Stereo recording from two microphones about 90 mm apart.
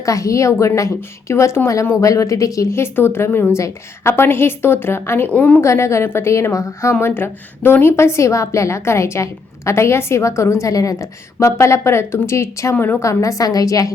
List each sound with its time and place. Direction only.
0.0 s a woman's voice: 40° left (ahead or behind); by 5.6 s 15° left (ahead or behind)
5.6 s a woman's voice: 30° left (ahead or behind)
12.7 s a woman's voice: 20° left (ahead or behind)
13.0 s a woman's voice: 35° left (ahead or behind)